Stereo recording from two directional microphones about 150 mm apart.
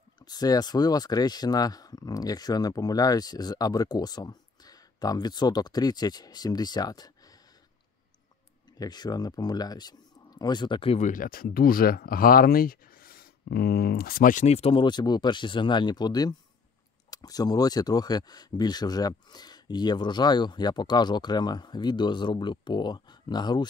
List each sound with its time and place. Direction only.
0.2 s speech: 25° left (ahead or behind)
8.7 s speech: 25° left (ahead or behind)
11.0 s speech: 60° left (ahead or behind); by 23.7 s 30° left (ahead or behind)